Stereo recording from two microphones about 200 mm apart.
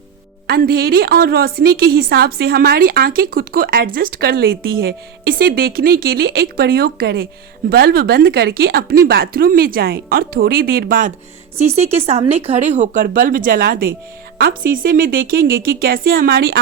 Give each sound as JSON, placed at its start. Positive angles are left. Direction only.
{"t": 0.4, "sound": "a woman's voice", "side_deg": -50}
{"t": 11.5, "sound": "a woman's voice", "side_deg": -30}